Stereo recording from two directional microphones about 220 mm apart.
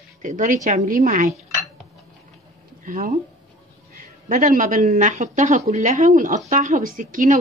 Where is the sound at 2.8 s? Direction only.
40° right (ahead or behind).